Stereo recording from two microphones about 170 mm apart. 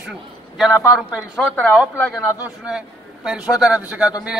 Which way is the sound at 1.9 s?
20° left (ahead or behind).